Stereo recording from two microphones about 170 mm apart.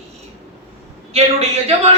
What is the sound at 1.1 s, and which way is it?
Speech, 35° right (ahead or behind).